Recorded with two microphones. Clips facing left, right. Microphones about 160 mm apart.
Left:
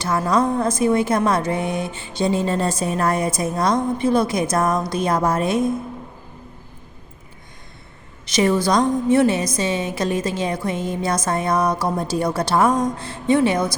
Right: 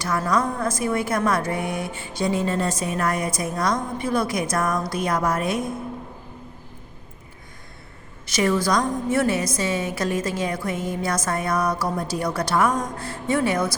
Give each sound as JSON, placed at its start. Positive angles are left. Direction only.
{"t": 0.0, "sound": "a woman's voice", "side_deg": 25}
{"t": 8.3, "sound": "a woman's voice", "side_deg": 20}